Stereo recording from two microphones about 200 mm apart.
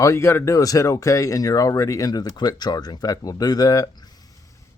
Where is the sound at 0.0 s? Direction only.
15° left (ahead or behind).